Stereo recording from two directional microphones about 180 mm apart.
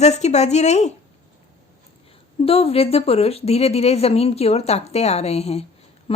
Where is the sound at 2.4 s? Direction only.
35° left (ahead or behind).